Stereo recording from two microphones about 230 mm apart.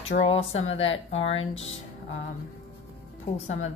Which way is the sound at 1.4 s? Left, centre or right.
Left.